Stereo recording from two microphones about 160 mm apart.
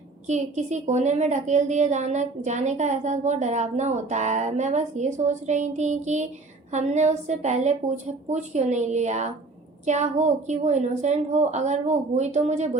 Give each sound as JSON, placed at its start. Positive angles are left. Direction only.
{"t": 0.3, "sound": "a woman's voice", "side_deg": -45}